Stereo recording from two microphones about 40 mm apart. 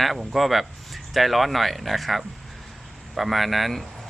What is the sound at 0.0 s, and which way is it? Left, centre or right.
Speech, centre.